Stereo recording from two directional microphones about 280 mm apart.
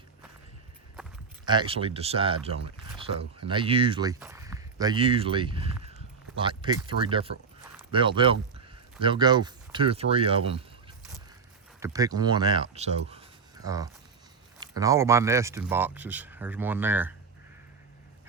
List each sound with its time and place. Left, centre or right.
1.5 s speech: centre
11.8 s speech: centre